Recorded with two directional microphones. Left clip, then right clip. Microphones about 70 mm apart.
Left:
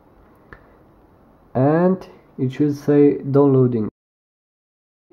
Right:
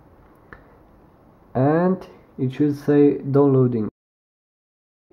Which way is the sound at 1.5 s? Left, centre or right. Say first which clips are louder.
Left 2 dB; left.